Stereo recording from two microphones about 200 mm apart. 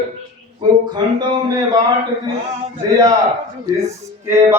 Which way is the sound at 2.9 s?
15° right (ahead or behind).